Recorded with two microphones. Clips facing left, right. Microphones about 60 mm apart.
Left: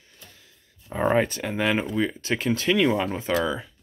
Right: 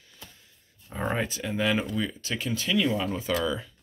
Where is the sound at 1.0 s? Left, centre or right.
Left.